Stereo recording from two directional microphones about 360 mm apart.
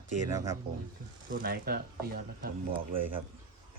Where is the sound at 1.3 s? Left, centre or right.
Right.